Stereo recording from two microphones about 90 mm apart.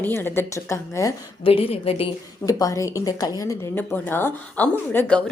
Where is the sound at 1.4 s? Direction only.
90° left.